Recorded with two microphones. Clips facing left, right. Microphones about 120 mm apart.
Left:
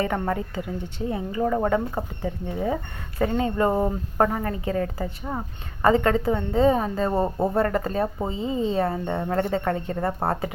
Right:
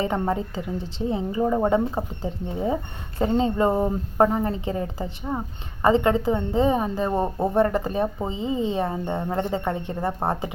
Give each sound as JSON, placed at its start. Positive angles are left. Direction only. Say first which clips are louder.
{"t": 0.0, "sound": "a woman's voice", "louder": "right 1 dB", "side_deg": -25}
{"t": 3.7, "sound": "speech", "louder": "right 1 dB", "side_deg": -5}
{"t": 4.2, "sound": "a woman's voice", "louder": "right 2 dB", "side_deg": -25}